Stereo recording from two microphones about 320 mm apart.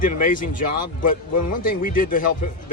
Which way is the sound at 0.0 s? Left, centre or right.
Left.